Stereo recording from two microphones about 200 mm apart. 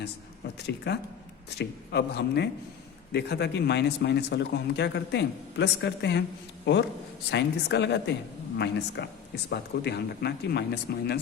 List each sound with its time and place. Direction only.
0.9 s a man's voice: 55° left (ahead or behind)